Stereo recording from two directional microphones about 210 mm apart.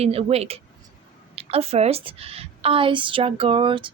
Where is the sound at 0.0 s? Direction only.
30° right (ahead or behind).